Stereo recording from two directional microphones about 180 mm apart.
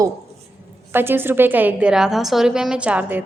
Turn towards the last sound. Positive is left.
turn(degrees=-5)  # may be behind; listen again after turning